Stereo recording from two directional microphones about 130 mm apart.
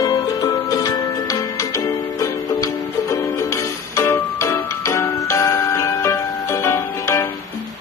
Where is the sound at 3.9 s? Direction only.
20° left (ahead or behind).